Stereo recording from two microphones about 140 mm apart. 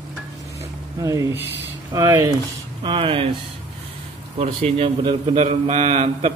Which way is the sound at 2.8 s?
40° right (ahead or behind).